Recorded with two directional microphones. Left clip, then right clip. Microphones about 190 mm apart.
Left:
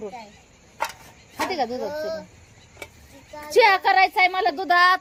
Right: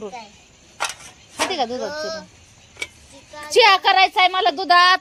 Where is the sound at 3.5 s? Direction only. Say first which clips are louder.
Right 3 dB; 15° right (ahead or behind).